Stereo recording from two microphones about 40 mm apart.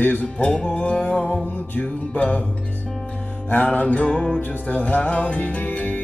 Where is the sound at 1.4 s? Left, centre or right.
Left.